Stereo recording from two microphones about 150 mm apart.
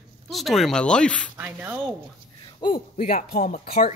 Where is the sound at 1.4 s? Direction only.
15° right (ahead or behind).